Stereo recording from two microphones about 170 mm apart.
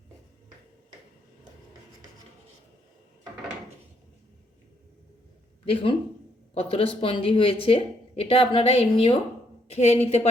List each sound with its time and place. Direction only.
5.6 s a woman's voice: 30° left (ahead or behind)